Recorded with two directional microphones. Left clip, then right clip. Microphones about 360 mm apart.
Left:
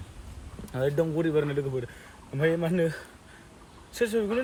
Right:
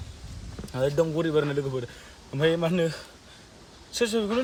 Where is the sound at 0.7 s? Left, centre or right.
Centre.